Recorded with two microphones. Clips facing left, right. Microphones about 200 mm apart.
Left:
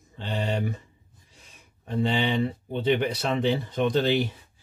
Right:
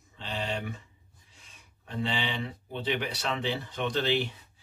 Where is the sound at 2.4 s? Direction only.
40° left (ahead or behind).